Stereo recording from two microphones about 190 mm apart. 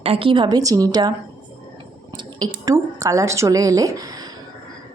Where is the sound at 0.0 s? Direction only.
30° right (ahead or behind).